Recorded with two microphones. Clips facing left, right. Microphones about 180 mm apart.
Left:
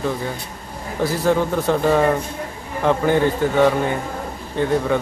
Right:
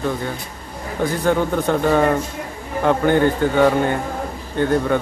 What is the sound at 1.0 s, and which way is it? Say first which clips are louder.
Speech: even; centre (ahead or behind).